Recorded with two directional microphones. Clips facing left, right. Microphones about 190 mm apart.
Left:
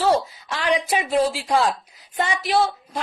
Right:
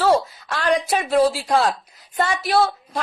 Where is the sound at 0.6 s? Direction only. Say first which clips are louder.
Right 2 dB; 45° right (ahead or behind).